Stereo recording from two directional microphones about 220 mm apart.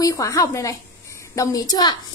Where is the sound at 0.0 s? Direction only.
15° left (ahead or behind).